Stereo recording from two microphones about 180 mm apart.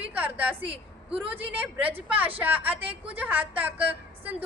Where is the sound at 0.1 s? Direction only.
10° right (ahead or behind).